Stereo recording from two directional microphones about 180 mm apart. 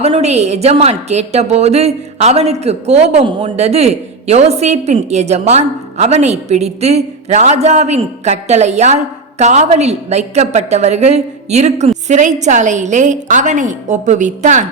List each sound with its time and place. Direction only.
0.0 s a woman's voice: 35° right (ahead or behind)